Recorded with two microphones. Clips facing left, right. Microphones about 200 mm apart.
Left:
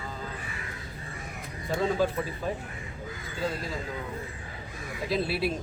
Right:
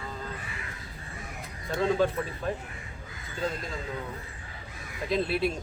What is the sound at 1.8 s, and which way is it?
Speech, 5° left (ahead or behind).